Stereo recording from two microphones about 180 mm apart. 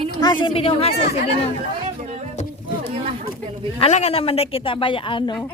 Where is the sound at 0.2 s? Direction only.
25° left (ahead or behind).